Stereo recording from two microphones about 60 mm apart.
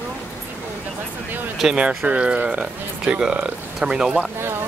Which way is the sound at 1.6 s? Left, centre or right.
Centre.